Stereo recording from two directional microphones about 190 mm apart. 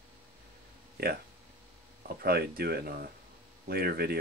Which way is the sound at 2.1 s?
55° right (ahead or behind).